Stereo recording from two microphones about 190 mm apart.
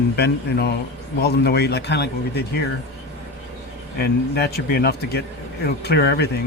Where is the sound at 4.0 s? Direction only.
55° left (ahead or behind).